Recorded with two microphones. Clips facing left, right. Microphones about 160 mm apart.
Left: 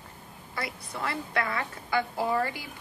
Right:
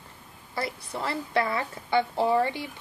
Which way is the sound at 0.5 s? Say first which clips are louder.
Right 4 dB; 30° right (ahead or behind).